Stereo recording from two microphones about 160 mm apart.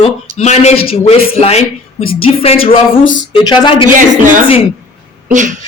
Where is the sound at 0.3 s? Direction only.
45° left (ahead or behind); by 3.8 s 30° left (ahead or behind).